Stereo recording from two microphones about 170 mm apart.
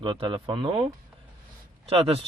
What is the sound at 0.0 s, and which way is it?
Speech, 30° right (ahead or behind).